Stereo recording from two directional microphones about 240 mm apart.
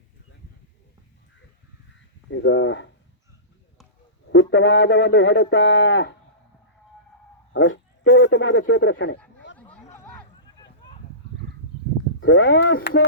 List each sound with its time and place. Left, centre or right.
2.3 s speech: left
4.3 s speech: left
7.5 s speech: left
9.6 s a sound: centre
12.2 s speech: left